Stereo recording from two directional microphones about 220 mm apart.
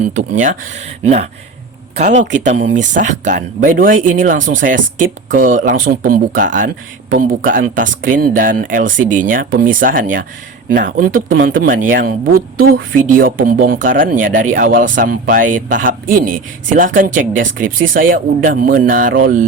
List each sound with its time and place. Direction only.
0.0 s speech: 35° right (ahead or behind)